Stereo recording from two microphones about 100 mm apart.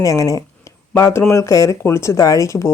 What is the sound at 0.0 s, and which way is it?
Speech, 35° left (ahead or behind).